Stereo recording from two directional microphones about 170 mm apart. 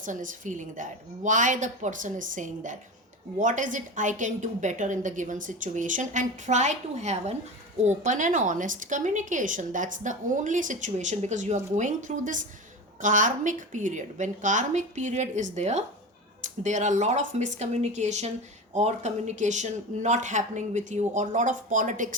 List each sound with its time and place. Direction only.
0.0 s a woman's voice: 50° right (ahead or behind)